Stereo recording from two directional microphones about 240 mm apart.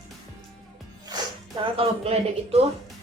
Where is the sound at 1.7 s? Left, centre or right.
Right.